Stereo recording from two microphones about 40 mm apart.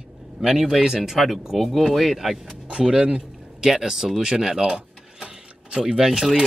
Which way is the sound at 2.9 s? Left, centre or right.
Right.